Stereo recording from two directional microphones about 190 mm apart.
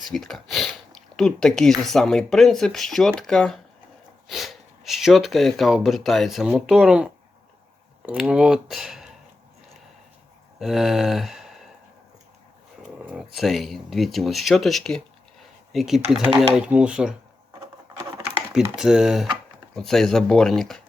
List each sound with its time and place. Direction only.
0.1 s speech: centre (ahead or behind)
10.6 s speech: centre (ahead or behind)
12.8 s speech: 5° right (ahead or behind)
16.2 s speech: 25° right (ahead or behind)
16.6 s speech: 5° right (ahead or behind)
18.3 s speech: 5° right (ahead or behind)